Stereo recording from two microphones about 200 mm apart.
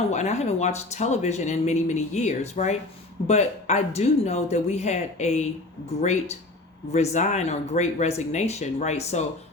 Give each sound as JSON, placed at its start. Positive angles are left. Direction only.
{"t": 0.1, "sound": "speech", "side_deg": 35}
{"t": 6.9, "sound": "speech", "side_deg": 35}